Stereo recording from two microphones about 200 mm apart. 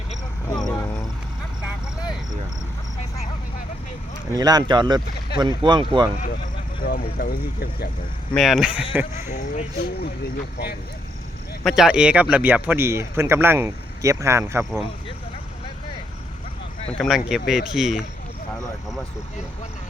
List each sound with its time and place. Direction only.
0.6 s a sound: 15° left (ahead or behind)
4.4 s speech: 20° right (ahead or behind)
6.8 s speech: 50° left (ahead or behind)
8.4 s speech: centre (ahead or behind)
9.3 s speech: 40° left (ahead or behind)
11.6 s speech: centre (ahead or behind)
17.0 s speech: centre (ahead or behind)